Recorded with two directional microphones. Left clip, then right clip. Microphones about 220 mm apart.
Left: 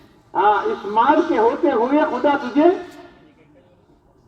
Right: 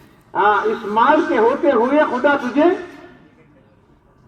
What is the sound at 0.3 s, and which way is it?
A man's voice, 30° right (ahead or behind).